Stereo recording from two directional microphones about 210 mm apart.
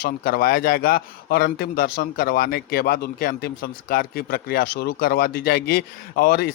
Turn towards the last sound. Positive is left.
turn(degrees=50)  # may be behind; listen again after turning